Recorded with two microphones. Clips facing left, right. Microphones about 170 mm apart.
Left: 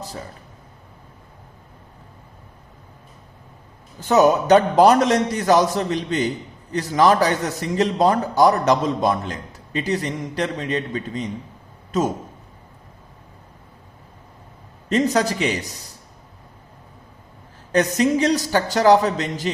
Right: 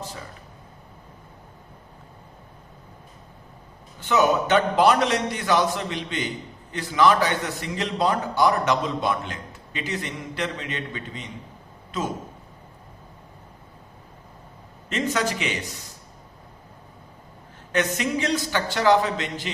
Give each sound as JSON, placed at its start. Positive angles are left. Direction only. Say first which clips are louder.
{"t": 4.0, "sound": "a man's voice", "louder": "left 5 dB", "side_deg": 40}
{"t": 14.8, "sound": "a man's voice", "louder": "left 6 dB", "side_deg": 40}
{"t": 17.7, "sound": "a man's voice", "louder": "left 6 dB", "side_deg": 40}